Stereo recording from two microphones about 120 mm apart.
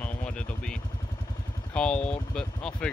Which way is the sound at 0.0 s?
10° left (ahead or behind).